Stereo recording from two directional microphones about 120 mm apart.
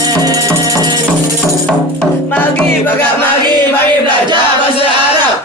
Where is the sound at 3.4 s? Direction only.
35° right (ahead or behind).